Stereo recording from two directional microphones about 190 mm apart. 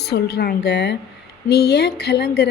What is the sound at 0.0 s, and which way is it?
Speech, 55° left (ahead or behind).